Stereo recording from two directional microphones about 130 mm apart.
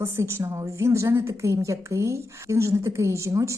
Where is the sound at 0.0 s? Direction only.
20° right (ahead or behind).